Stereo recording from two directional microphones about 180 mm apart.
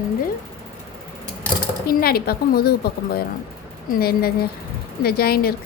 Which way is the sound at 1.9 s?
55° left (ahead or behind).